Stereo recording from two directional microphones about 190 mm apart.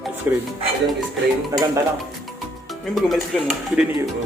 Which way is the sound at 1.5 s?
15° right (ahead or behind).